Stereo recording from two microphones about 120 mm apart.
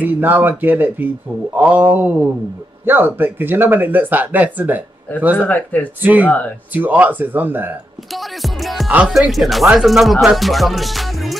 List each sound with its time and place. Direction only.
0.0 s speech: 15° right (ahead or behind)
5.4 s speech: 15° left (ahead or behind)
6.7 s speech: 15° right (ahead or behind)
8.1 s music: centre (ahead or behind)
8.9 s speech: 5° right (ahead or behind)
10.2 s music: centre (ahead or behind)